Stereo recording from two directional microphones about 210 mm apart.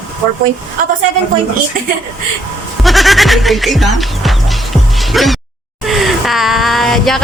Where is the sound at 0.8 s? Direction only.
40° right (ahead or behind).